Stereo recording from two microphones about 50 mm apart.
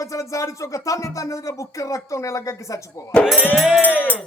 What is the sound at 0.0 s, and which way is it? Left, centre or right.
Music, left.